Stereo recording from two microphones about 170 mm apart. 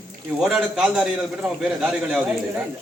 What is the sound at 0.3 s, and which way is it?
Speech, 5° right (ahead or behind).